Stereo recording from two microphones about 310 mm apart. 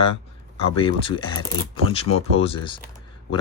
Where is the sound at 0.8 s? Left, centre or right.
Centre.